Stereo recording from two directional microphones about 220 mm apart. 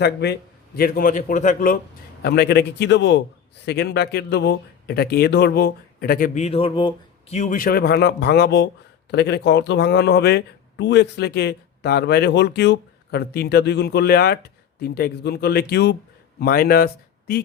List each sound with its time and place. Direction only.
0.0 s a man's voice: 50° left (ahead or behind)
2.2 s speech: 45° left (ahead or behind)